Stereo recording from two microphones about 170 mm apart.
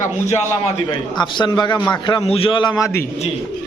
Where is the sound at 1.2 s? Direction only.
25° left (ahead or behind).